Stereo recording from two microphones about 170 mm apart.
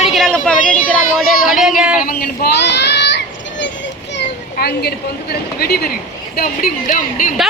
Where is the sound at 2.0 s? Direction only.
80° left.